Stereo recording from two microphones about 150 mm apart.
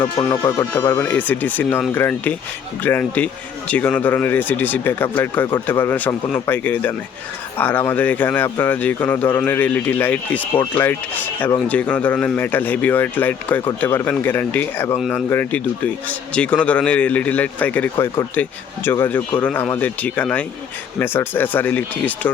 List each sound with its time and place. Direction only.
0.0 s a man's voice: 30° left (ahead or behind); by 10.4 s 10° left (ahead or behind)
11.7 s a man's voice: 10° left (ahead or behind)